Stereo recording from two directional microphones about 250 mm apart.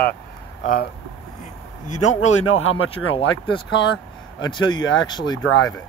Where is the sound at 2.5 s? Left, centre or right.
Left.